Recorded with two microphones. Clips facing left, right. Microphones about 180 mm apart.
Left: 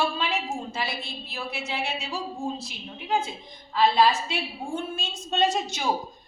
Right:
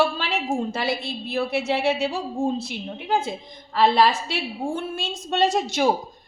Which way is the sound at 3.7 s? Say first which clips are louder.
Right 2 dB; 70° right (ahead or behind).